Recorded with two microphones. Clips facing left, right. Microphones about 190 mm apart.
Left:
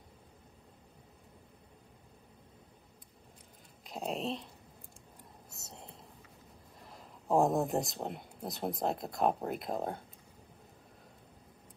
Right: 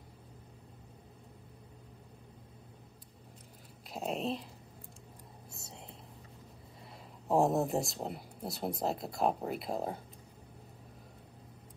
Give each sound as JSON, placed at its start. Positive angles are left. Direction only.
{"t": 3.9, "sound": "speech", "side_deg": 0}
{"t": 5.6, "sound": "whispering", "side_deg": 0}
{"t": 7.2, "sound": "speech", "side_deg": 0}